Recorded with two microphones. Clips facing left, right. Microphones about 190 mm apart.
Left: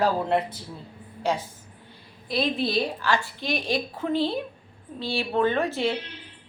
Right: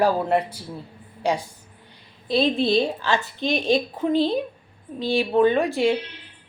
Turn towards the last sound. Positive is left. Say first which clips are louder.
# right 5 dB
turn(degrees=-15)  # may be behind; listen again after turning